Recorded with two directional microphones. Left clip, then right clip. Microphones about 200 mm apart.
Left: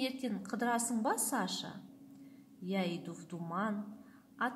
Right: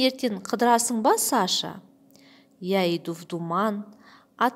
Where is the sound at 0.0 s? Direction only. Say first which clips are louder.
Right 14 dB; 45° right (ahead or behind).